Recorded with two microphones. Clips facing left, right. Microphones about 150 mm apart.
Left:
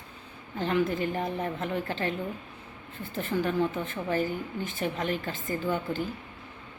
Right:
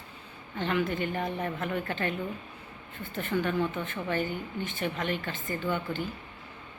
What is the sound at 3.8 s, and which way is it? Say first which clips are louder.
A woman's voice: left 2 dB; 35° left (ahead or behind).